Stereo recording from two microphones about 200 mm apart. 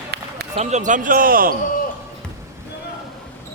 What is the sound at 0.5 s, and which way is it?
A man's voice, 35° right (ahead or behind).